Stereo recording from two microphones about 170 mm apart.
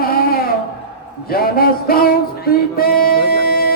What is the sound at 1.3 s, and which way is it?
Music, 60° left (ahead or behind).